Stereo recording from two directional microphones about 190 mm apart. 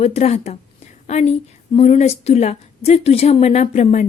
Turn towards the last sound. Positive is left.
turn(degrees=35)  # may be behind; listen again after turning